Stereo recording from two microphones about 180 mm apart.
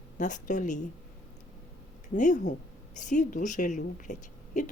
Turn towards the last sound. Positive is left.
turn(degrees=45)  # may be behind; listen again after turning